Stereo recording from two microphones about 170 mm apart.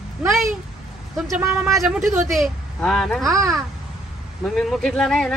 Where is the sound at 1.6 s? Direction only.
Centre (ahead or behind).